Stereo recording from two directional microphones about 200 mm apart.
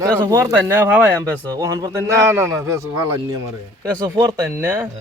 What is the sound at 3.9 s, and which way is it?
Speech, 15° right (ahead or behind).